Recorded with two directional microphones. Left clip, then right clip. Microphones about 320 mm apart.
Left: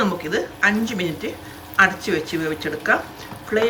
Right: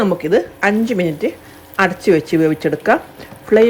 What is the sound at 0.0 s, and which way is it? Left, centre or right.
Speech, centre.